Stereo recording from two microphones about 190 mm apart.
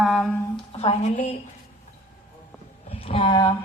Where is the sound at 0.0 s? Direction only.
Centre (ahead or behind).